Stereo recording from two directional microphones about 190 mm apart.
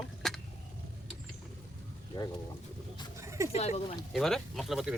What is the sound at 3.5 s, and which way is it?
Speech, 35° left (ahead or behind).